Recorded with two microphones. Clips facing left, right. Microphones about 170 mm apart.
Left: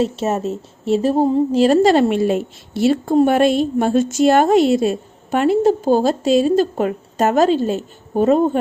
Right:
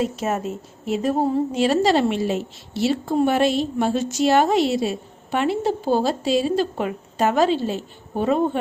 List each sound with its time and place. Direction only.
0.0 s a woman's voice: 30° left (ahead or behind)
1.6 s a woman's voice: 45° left (ahead or behind)